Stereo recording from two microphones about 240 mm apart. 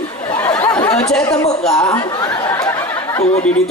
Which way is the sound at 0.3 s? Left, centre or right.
Centre.